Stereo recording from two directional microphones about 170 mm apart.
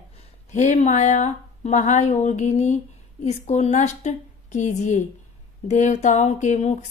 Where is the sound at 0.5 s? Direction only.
45° left (ahead or behind).